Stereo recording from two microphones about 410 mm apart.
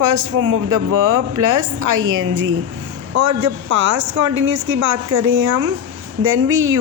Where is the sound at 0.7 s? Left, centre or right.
Right.